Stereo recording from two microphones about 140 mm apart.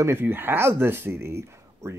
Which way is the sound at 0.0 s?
15° right (ahead or behind).